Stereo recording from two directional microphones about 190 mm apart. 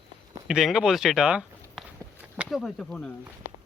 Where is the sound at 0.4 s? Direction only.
5° right (ahead or behind).